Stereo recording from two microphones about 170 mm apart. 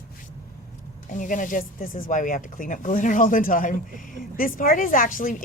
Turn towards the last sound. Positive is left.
turn(degrees=55)  # may be behind; listen again after turning